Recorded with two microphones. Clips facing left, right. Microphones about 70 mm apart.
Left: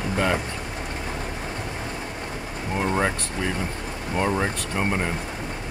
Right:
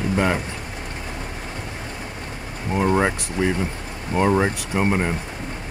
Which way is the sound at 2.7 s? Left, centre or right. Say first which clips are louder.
Right 4 dB; centre.